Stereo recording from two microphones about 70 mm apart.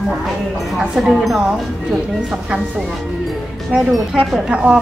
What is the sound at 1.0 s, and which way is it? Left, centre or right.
Speech, centre.